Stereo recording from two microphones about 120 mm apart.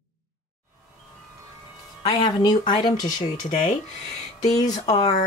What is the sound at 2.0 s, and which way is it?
Speech, 40° left (ahead or behind).